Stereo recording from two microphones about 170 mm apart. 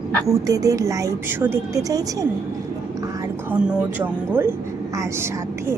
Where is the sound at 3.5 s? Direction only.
10° right (ahead or behind).